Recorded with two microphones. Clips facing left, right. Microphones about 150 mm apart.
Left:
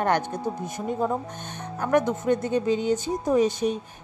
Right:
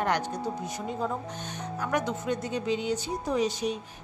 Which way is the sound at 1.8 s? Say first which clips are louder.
Left 7 dB; 50° left (ahead or behind).